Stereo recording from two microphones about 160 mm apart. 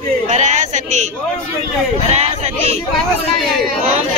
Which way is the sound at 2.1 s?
40° right (ahead or behind).